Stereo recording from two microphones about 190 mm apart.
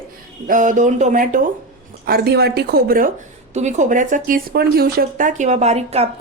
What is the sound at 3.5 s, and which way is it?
Speech, 40° right (ahead or behind).